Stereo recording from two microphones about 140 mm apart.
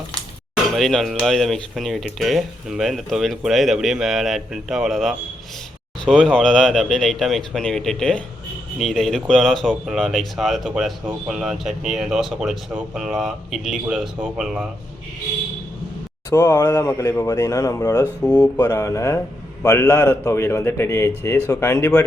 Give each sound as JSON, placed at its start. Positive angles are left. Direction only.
{"t": 0.7, "sound": "speech", "side_deg": 0}
{"t": 16.3, "sound": "speech", "side_deg": 25}
{"t": 18.3, "sound": "speech", "side_deg": 10}